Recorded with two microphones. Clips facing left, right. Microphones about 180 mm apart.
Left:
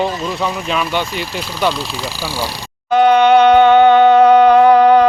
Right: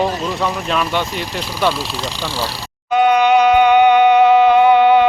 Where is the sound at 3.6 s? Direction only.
15° right (ahead or behind).